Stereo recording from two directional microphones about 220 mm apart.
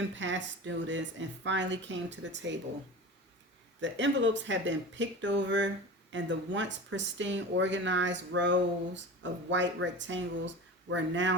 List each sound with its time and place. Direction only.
0.2 s speech: 55° right (ahead or behind)
3.8 s speech: 55° right (ahead or behind)